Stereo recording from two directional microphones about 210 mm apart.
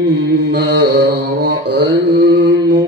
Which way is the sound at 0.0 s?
55° right (ahead or behind).